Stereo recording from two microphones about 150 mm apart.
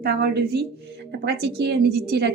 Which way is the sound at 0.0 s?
90° right.